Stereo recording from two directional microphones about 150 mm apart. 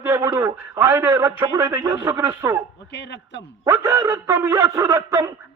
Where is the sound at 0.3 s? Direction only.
20° right (ahead or behind).